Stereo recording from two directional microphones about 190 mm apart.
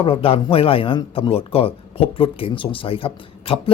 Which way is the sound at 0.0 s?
30° left (ahead or behind).